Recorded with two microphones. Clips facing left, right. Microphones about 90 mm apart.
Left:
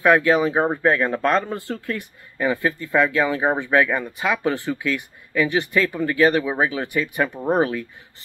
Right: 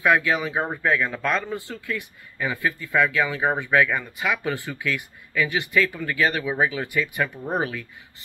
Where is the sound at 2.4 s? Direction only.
25° left (ahead or behind).